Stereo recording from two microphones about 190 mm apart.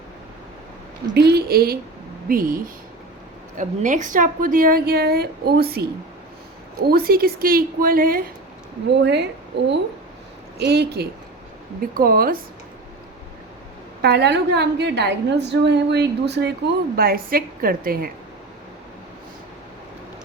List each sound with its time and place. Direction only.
1.1 s a woman's voice: 60° right (ahead or behind)
6.9 s a woman's voice: 50° right (ahead or behind)
8.9 s a woman's voice: 65° right (ahead or behind)
14.0 s a woman's voice: 60° right (ahead or behind)
16.9 s a woman's voice: 50° right (ahead or behind)